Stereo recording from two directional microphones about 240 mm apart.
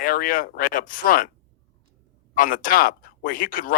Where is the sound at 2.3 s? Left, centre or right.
Left.